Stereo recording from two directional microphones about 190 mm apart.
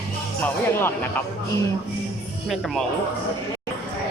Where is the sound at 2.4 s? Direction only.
Centre (ahead or behind).